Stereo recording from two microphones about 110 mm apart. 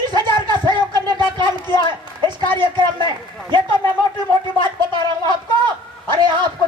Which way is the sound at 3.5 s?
45° right (ahead or behind).